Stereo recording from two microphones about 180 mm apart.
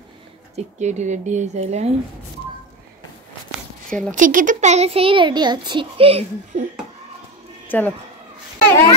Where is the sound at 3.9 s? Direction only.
5° left (ahead or behind).